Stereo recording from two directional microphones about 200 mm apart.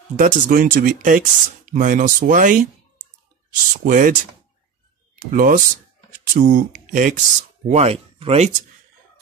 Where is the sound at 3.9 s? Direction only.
40° right (ahead or behind).